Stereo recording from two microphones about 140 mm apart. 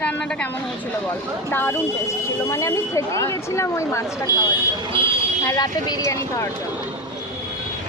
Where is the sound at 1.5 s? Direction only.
15° left (ahead or behind).